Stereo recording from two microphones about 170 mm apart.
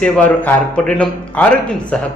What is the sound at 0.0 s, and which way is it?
Speech, 10° left (ahead or behind).